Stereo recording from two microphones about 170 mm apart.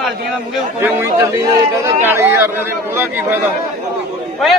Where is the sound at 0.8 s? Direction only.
15° right (ahead or behind).